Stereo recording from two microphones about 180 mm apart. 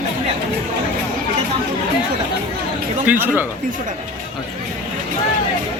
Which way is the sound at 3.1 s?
10° right (ahead or behind).